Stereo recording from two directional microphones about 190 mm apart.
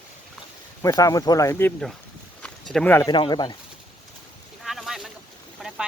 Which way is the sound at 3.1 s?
25° left (ahead or behind).